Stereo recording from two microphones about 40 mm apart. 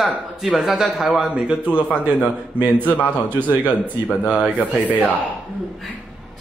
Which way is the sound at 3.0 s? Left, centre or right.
Left.